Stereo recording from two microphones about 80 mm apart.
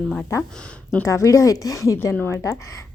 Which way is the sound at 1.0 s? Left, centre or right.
Left.